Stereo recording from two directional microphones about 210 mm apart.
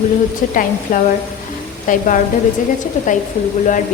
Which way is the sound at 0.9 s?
40° left (ahead or behind).